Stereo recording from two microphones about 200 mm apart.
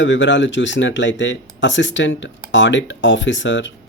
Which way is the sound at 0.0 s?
65° left (ahead or behind).